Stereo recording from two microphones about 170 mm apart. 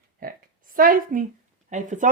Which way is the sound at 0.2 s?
55° right (ahead or behind).